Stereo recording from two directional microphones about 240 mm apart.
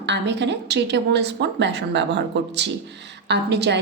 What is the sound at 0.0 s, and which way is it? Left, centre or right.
A woman's voice, right.